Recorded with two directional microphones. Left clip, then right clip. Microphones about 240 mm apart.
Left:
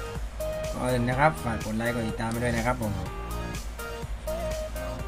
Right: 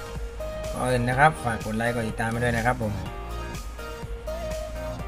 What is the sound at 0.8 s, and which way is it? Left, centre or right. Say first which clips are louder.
Speech: right 4 dB; right.